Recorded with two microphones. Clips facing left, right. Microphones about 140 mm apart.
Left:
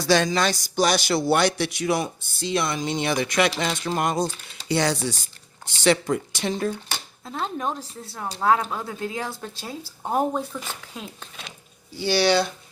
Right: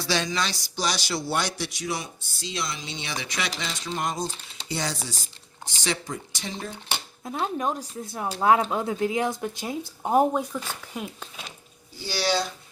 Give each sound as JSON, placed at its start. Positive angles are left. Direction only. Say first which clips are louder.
{"t": 0.0, "sound": "a man's voice", "louder": "left 7 dB", "side_deg": 50}
{"t": 6.8, "sound": "speech", "louder": "right 2 dB", "side_deg": -10}
{"t": 11.9, "sound": "a man's voice", "louder": "left 6 dB", "side_deg": 65}